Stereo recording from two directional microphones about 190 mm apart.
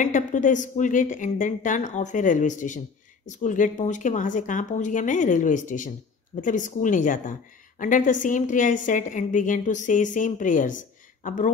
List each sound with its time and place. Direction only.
0.0 s a woman's voice: 40° left (ahead or behind)